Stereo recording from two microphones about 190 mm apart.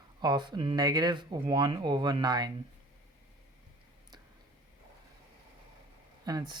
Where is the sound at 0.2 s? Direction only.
25° right (ahead or behind).